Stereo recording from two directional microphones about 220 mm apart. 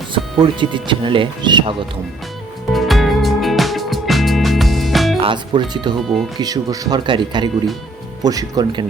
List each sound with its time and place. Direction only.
0.1 s speech: 20° right (ahead or behind)
2.7 s music: centre (ahead or behind)
5.2 s speech: 20° right (ahead or behind)